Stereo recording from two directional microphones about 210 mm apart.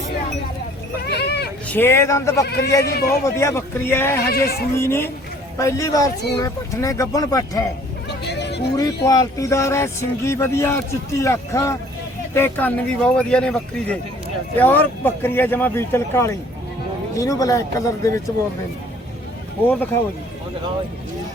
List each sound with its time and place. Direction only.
1.0 s a sound: 50° left (ahead or behind)
1.6 s speech: 10° left (ahead or behind)
2.5 s a man's voice: 50° left (ahead or behind)
3.2 s speech: 15° left (ahead or behind)
4.3 s a man's voice: 45° left (ahead or behind)
4.8 s speech: 10° left (ahead or behind)
8.2 s a sound: 55° left (ahead or behind)
9.0 s speech: 15° left (ahead or behind)
19.6 s speech: 10° left (ahead or behind)